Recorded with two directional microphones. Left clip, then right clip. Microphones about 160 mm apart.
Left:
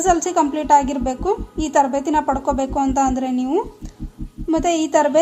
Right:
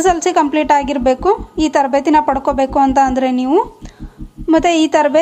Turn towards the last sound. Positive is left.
turn(degrees=-20)  # may be behind; listen again after turning